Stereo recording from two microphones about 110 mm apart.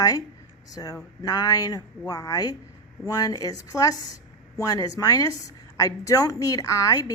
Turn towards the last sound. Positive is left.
turn(degrees=30)  # may be behind; listen again after turning